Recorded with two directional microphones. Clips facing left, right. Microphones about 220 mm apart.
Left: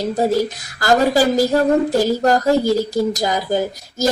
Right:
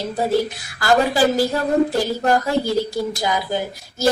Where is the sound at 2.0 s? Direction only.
40° left (ahead or behind).